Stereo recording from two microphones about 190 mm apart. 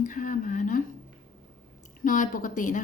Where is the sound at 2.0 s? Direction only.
45° left (ahead or behind).